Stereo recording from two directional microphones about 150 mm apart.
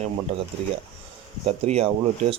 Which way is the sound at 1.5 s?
45° right (ahead or behind).